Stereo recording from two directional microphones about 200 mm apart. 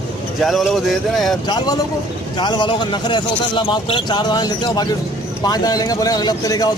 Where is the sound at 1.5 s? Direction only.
20° left (ahead or behind).